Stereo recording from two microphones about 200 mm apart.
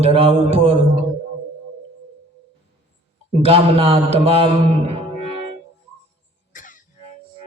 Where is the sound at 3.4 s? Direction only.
25° right (ahead or behind).